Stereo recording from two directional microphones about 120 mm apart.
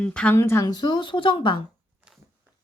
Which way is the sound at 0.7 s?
35° left (ahead or behind).